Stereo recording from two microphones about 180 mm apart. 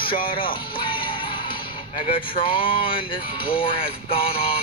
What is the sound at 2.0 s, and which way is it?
Speech, 30° left (ahead or behind).